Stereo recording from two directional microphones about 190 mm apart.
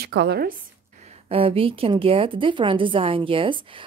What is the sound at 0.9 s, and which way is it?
Speech, 30° right (ahead or behind).